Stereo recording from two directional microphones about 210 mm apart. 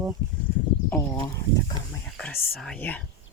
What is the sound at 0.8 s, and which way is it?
Speech, 15° left (ahead or behind).